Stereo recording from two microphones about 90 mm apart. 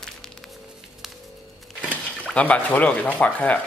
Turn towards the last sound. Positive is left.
turn(degrees=15)  # may be behind; listen again after turning